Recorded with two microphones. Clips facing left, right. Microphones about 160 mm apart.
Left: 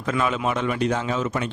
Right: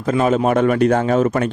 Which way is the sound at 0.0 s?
40° right (ahead or behind).